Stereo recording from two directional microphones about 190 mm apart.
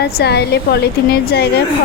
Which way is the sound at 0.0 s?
60° left (ahead or behind).